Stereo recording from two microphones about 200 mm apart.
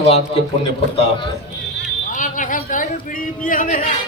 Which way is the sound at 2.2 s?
40° left (ahead or behind).